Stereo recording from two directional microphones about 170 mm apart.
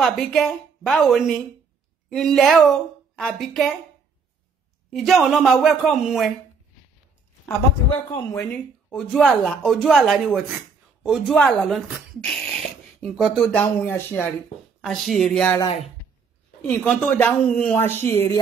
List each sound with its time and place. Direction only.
0.0 s a woman's voice: centre (ahead or behind)
4.9 s speech: centre (ahead or behind)
8.1 s speech: 15° left (ahead or behind)
8.9 s speech: 5° left (ahead or behind)
16.6 s speech: 10° left (ahead or behind)